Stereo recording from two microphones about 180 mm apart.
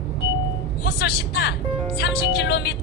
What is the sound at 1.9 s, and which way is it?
Music, 70° left (ahead or behind).